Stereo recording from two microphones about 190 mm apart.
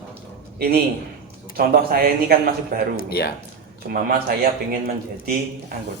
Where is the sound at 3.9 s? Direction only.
50° right (ahead or behind).